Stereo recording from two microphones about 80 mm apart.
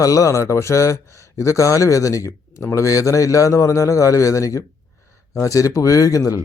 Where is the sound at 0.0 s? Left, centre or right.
Left.